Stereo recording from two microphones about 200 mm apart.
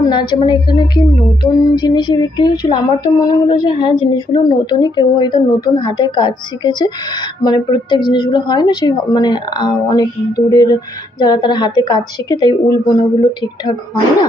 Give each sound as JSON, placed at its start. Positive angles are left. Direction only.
{"t": 0.0, "sound": "a woman's voice", "side_deg": 20}